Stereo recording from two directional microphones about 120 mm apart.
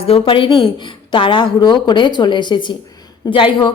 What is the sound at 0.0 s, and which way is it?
A woman's voice, 50° left (ahead or behind).